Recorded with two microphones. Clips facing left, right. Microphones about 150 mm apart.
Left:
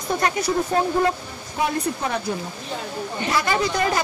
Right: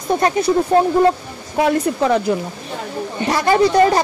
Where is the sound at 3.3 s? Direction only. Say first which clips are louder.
Right 9 dB; 40° right (ahead or behind).